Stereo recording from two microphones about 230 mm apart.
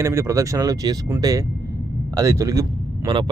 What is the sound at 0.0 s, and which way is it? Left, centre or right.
Speech, centre.